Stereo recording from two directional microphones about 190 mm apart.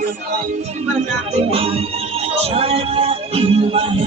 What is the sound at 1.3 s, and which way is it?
Music, 30° right (ahead or behind).